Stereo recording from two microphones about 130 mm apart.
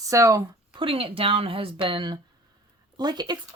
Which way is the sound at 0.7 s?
40° right (ahead or behind).